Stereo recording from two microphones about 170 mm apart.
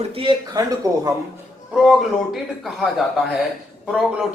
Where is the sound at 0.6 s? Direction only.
20° right (ahead or behind).